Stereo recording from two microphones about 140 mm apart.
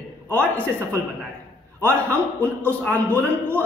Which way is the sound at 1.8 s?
10° left (ahead or behind).